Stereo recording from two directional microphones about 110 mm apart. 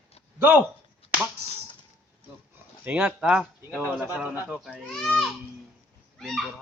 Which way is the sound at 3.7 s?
15° left (ahead or behind).